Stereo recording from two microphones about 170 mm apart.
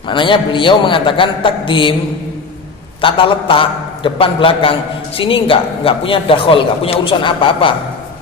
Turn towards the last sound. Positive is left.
turn(degrees=30)  # may be behind; listen again after turning